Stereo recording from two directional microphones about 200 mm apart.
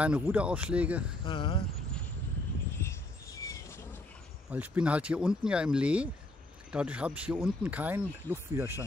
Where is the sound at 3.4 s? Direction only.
15° left (ahead or behind).